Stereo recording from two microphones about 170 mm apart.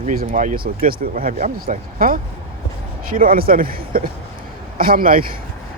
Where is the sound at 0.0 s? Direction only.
55° right (ahead or behind).